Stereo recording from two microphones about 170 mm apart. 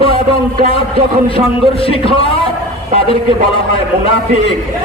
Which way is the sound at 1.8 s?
35° left (ahead or behind).